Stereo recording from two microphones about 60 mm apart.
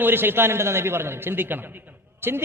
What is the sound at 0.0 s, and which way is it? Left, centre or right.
A man's voice, right.